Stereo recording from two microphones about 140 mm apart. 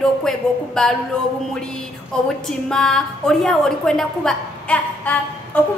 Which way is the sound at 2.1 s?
5° left (ahead or behind).